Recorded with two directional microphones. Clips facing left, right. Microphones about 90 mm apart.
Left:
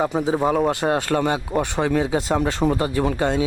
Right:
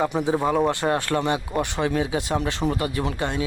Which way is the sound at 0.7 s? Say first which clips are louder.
Left 2 dB; 20° left (ahead or behind).